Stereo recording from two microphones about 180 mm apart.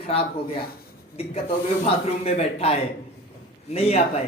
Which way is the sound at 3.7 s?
35° left (ahead or behind).